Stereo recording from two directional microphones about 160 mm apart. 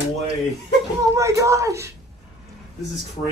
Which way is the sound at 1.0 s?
20° right (ahead or behind).